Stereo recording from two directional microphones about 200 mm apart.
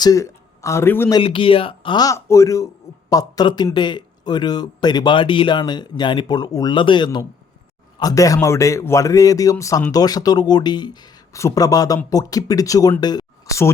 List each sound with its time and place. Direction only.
0.0 s speech: 15° left (ahead or behind)
1.2 s a man's voice: 25° left (ahead or behind)